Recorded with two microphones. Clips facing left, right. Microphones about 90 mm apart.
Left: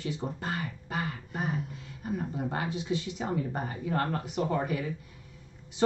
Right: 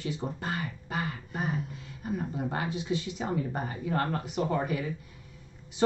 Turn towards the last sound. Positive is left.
turn(degrees=-10)  # may be behind; listen again after turning